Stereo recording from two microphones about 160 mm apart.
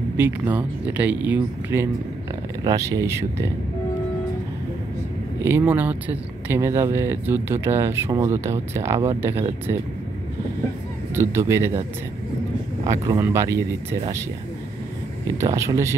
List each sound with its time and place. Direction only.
0.2 s speech: 10° right (ahead or behind)
5.4 s speech: 15° right (ahead or behind)
11.1 s speech: 15° right (ahead or behind)
12.8 s speech: 20° right (ahead or behind)
15.4 s speech: 20° right (ahead or behind)